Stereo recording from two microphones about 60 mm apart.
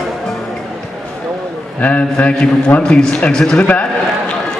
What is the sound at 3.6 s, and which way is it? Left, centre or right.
Speech, left.